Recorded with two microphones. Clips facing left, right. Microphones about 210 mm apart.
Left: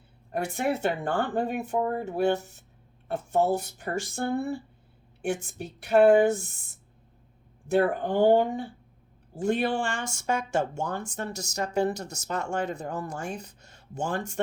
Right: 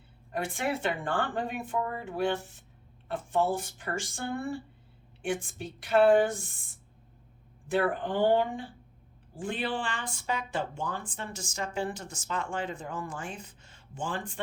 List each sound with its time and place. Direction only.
0.3 s speech: 40° left (ahead or behind)
5.3 s speech: 45° left (ahead or behind)
7.7 s speech: 45° left (ahead or behind)